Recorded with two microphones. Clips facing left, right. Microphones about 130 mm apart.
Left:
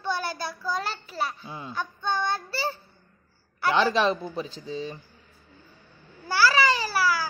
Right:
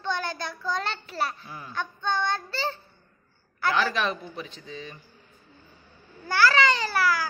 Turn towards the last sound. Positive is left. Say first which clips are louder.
# even
turn(degrees=5)  # may be behind; listen again after turning